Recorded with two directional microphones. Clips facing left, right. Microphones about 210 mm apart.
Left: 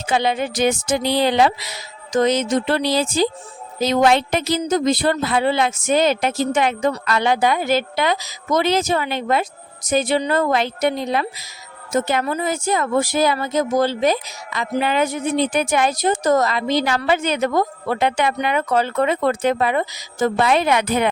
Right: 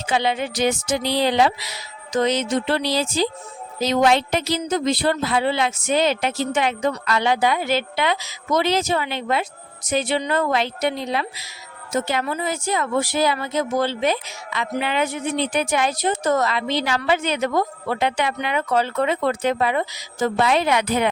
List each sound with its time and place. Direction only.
0.1 s speech: 45° left (ahead or behind)